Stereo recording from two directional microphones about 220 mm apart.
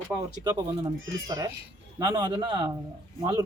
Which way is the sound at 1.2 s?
15° right (ahead or behind).